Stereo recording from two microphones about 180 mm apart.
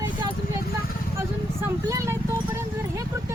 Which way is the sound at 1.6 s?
15° right (ahead or behind).